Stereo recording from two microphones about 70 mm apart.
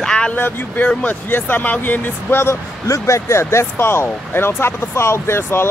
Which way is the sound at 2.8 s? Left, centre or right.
Left.